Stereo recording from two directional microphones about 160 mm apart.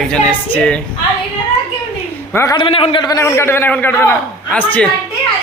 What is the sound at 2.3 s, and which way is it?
Speech, 15° left (ahead or behind).